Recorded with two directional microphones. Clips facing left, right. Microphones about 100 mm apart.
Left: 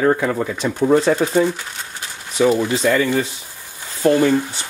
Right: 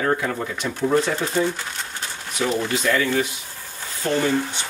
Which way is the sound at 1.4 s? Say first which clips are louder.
Left 3 dB; 45° left (ahead or behind).